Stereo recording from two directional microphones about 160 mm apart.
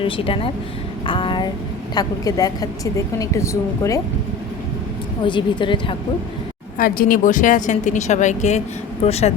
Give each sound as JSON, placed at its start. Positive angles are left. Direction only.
{"t": 0.0, "sound": "speech", "side_deg": 35}
{"t": 5.2, "sound": "speech", "side_deg": 30}
{"t": 6.7, "sound": "speech", "side_deg": 60}